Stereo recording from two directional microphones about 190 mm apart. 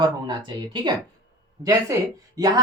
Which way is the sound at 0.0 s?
25° right (ahead or behind).